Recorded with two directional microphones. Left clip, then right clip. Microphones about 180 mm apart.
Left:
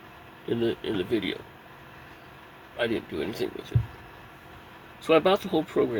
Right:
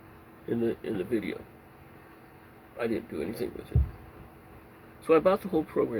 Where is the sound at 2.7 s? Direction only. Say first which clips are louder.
Left 3 dB; 50° left (ahead or behind).